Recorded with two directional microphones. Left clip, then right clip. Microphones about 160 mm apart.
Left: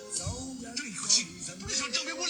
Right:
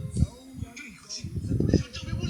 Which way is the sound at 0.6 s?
10° left (ahead or behind).